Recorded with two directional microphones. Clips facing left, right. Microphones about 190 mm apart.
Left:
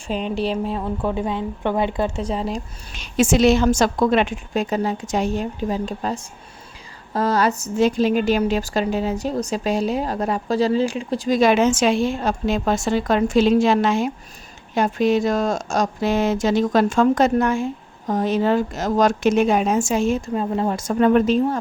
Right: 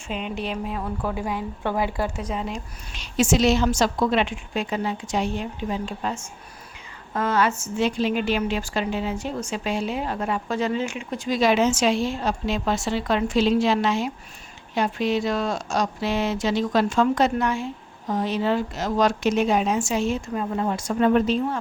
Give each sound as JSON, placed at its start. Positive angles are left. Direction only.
{"t": 0.1, "sound": "a woman's voice", "side_deg": 35}
{"t": 2.9, "sound": "a woman's voice", "side_deg": 50}
{"t": 11.3, "sound": "a woman's voice", "side_deg": 50}
{"t": 20.3, "sound": "a woman's voice", "side_deg": 30}